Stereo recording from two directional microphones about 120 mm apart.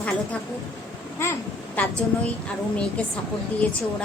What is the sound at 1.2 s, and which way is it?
Speech, 20° left (ahead or behind).